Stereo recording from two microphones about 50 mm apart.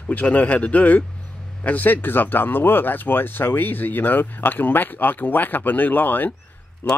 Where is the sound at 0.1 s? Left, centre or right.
Left.